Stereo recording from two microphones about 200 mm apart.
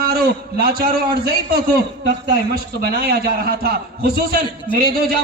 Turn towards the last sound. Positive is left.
turn(degrees=-50)  # may be behind; listen again after turning